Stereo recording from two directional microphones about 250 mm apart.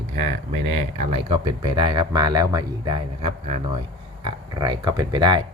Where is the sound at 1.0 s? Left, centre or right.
Right.